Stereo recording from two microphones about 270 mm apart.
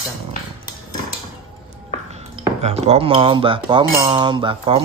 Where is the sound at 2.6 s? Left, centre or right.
Right.